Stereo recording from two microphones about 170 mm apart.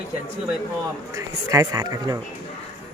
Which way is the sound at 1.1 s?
20° right (ahead or behind).